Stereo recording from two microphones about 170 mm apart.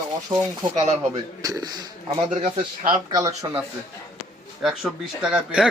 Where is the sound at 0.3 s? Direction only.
25° right (ahead or behind).